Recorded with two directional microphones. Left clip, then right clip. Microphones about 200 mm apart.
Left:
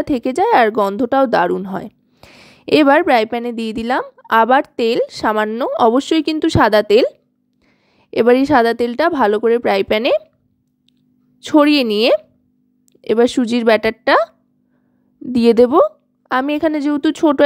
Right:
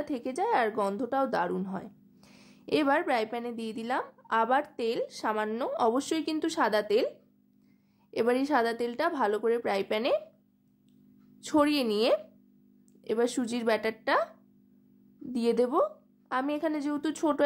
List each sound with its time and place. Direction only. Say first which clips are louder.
0.0 s a woman's voice: left 15 dB; 40° left (ahead or behind)
8.1 s a woman's voice: left 15 dB; 40° left (ahead or behind)
11.4 s a woman's voice: left 14 dB; 35° left (ahead or behind)
15.3 s a woman's voice: left 16 dB; 40° left (ahead or behind)